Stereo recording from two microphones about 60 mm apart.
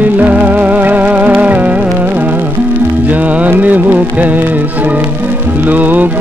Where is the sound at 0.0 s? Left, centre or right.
Right.